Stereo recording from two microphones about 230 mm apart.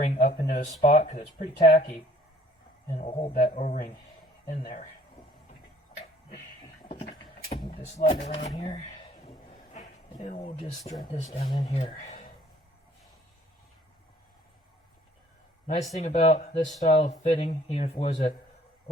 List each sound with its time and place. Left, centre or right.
0.0 s speech: left
7.5 s a sound: left
8.2 s speech: left
9.3 s a sound: centre
10.2 s speech: left
15.6 s speech: left